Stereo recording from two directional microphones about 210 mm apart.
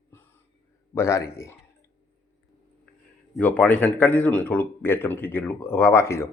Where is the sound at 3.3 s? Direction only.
5° left (ahead or behind).